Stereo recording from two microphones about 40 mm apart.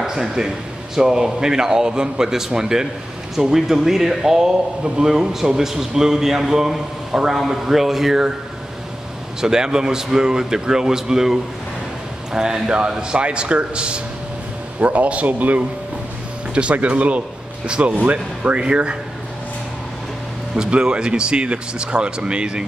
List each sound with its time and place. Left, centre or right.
0.0 s a man's voice: centre
9.4 s a man's voice: centre; by 17.2 s right
17.6 s speech: right
20.5 s speech: right